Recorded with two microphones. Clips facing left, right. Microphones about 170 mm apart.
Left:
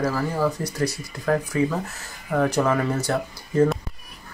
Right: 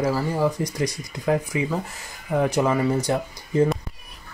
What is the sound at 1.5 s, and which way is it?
Speech, 15° right (ahead or behind).